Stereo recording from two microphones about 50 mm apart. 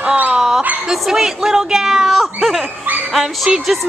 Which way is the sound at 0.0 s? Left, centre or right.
Right.